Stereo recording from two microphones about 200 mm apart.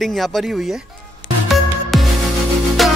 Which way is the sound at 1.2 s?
70° left (ahead or behind).